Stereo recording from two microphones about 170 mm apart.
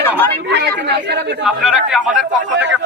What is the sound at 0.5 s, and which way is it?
Speech, 80° right.